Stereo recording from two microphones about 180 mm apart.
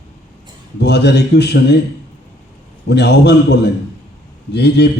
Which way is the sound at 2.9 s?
70° left (ahead or behind).